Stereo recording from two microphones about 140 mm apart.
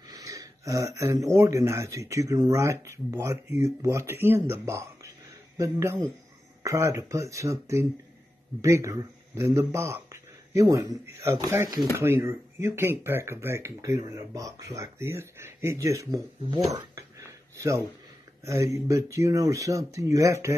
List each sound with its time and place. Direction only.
0.2 s a man's voice: 25° right (ahead or behind)
16.7 s a sound: 25° right (ahead or behind)
18.4 s speech: 20° right (ahead or behind)